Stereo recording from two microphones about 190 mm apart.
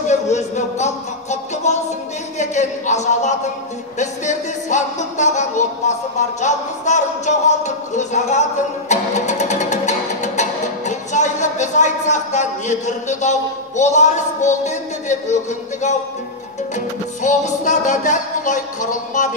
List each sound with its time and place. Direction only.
0.1 s music: 35° left (ahead or behind)
16.7 s music: 40° left (ahead or behind)